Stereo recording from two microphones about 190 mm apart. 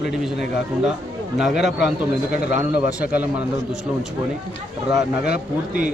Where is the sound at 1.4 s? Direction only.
5° right (ahead or behind).